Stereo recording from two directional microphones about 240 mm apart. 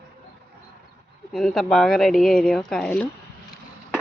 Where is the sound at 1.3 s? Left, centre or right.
Centre.